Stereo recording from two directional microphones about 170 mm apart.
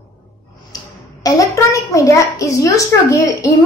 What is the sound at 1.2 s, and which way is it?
A child's voice, 20° left (ahead or behind).